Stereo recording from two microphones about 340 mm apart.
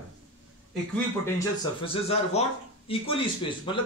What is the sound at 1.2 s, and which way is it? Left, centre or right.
Speech, centre.